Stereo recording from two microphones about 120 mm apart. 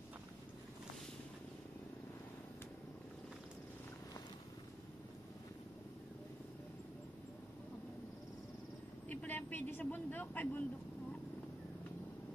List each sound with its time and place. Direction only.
9.1 s speech: 15° left (ahead or behind)